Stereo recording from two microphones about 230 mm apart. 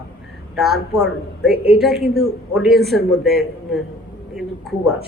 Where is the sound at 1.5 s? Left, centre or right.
Right.